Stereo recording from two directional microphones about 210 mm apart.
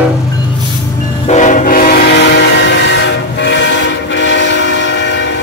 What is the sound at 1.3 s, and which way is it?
Train, 35° left (ahead or behind).